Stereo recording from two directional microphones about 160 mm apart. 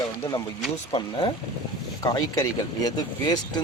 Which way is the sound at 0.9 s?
30° left (ahead or behind).